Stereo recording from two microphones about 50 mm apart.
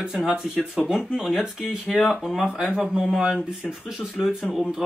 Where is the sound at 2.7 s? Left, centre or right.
Centre.